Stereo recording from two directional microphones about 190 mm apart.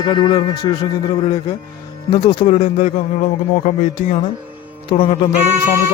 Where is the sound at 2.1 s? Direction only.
25° left (ahead or behind).